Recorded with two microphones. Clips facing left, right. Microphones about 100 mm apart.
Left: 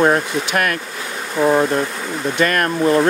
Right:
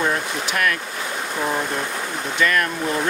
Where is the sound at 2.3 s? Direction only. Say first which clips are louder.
Left 3 dB; 50° left (ahead or behind).